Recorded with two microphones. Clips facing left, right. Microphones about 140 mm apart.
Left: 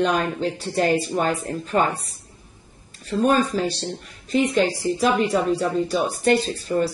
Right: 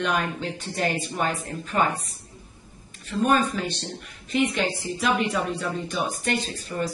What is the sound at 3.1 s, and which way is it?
A woman's voice, 35° left (ahead or behind).